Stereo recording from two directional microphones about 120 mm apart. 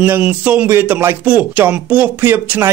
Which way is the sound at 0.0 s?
15° right (ahead or behind).